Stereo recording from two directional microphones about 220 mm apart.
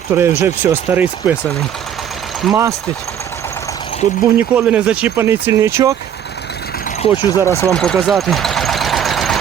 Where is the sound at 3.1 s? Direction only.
10° left (ahead or behind).